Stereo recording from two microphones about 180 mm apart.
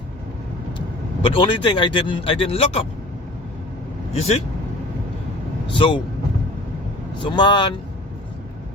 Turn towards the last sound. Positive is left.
turn(degrees=25)  # may be behind; listen again after turning